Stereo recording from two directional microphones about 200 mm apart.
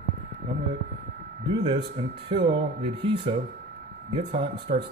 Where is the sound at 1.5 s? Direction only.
25° right (ahead or behind).